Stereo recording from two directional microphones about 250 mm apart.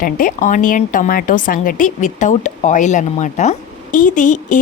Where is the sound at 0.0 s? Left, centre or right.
Left.